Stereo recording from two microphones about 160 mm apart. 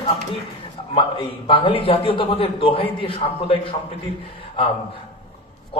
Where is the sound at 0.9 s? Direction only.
30° left (ahead or behind).